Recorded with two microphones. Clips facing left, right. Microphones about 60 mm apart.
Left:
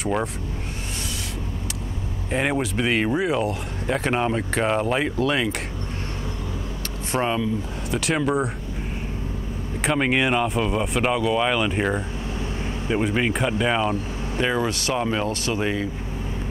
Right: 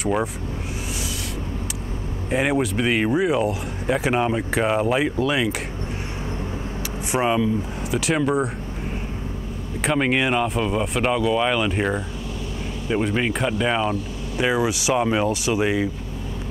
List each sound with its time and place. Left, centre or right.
0.0 s speech: centre
2.3 s speech: centre
7.1 s speech: centre
9.8 s speech: centre
14.4 s speech: centre